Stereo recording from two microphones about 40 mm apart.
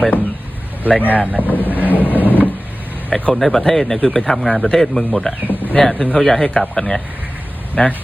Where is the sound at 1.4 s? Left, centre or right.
Left.